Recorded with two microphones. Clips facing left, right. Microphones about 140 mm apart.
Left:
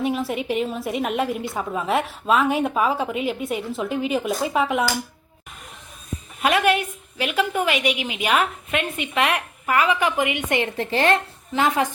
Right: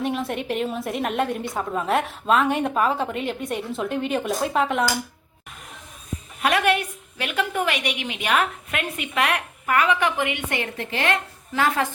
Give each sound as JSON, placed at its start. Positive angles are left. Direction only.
{"t": 0.0, "sound": "a woman's voice", "side_deg": 0}
{"t": 6.4, "sound": "a woman's voice", "side_deg": 0}
{"t": 11.5, "sound": "a woman's voice", "side_deg": 20}